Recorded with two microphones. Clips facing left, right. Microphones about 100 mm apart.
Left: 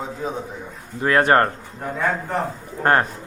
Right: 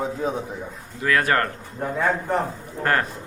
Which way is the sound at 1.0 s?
30° left (ahead or behind).